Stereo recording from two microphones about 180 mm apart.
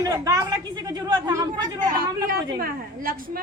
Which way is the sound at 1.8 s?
50° right (ahead or behind).